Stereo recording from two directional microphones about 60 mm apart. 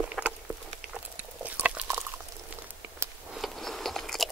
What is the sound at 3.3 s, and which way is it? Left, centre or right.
Biting, centre.